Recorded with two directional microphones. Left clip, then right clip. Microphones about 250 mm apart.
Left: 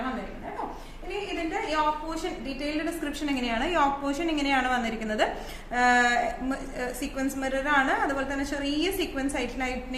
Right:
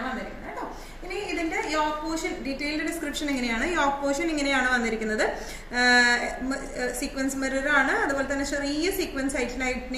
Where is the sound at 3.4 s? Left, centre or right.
Centre.